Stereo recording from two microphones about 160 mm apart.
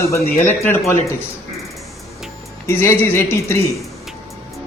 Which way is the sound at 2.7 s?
15° left (ahead or behind).